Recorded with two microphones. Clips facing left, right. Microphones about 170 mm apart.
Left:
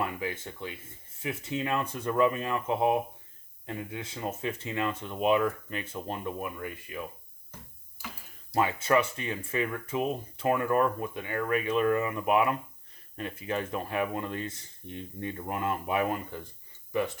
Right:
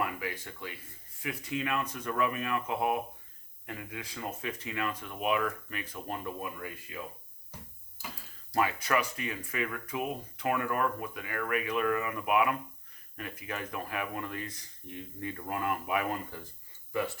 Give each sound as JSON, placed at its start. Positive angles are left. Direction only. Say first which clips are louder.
{"t": 0.0, "sound": "speech", "louder": "left 2 dB", "side_deg": 25}
{"t": 8.5, "sound": "speech", "louder": "left 4 dB", "side_deg": 25}